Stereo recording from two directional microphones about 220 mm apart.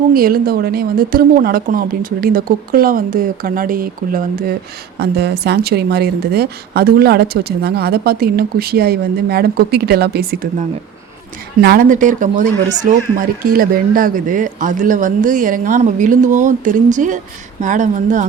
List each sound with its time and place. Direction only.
0.1 s a woman's voice: 40° right (ahead or behind)
11.6 s a woman's voice: 45° right (ahead or behind)